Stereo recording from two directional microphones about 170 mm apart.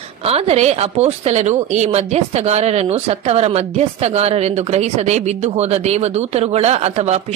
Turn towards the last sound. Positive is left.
turn(degrees=-40)  # may be behind; listen again after turning